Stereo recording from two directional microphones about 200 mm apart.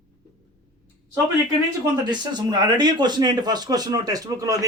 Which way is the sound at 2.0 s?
20° right (ahead or behind).